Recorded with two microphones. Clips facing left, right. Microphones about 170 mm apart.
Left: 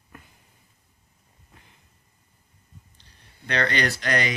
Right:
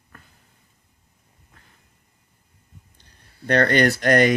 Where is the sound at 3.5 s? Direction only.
50° right (ahead or behind).